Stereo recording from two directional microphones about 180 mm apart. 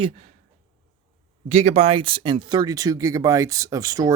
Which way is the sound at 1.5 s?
40° right (ahead or behind).